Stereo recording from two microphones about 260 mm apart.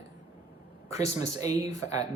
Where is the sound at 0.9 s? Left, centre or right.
Centre.